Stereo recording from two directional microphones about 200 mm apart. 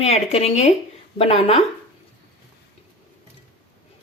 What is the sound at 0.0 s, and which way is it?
Speech, 30° left (ahead or behind).